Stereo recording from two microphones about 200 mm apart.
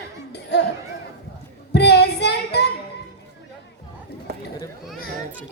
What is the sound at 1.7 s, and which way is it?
Child singing, 55° left (ahead or behind).